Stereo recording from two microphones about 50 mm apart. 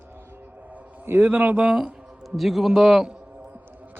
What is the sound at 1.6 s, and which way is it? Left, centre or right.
Speech, centre.